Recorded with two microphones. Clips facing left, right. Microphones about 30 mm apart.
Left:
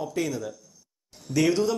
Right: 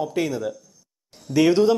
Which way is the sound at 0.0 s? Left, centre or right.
Right.